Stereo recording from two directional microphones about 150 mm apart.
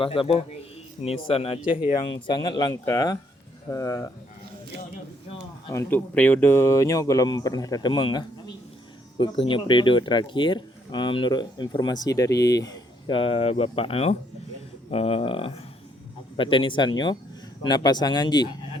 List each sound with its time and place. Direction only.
0.0 s speech: 35° left (ahead or behind); by 4.1 s 20° left (ahead or behind)
5.7 s speech: 15° left (ahead or behind)
13.1 s speech: 40° left (ahead or behind)